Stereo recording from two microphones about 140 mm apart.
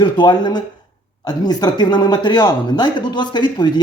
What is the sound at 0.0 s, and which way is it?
Speech, 30° left (ahead or behind).